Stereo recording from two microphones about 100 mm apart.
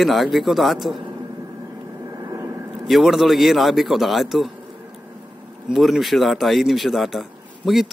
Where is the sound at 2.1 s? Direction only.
35° right (ahead or behind).